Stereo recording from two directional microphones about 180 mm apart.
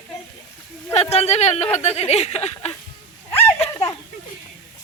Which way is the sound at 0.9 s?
35° left (ahead or behind).